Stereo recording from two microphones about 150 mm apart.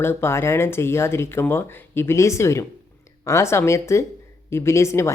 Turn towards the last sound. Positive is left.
turn(degrees=20)  # may be behind; listen again after turning